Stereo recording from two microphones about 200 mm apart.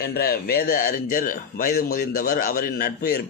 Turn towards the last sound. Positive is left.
turn(degrees=50)  # may be behind; listen again after turning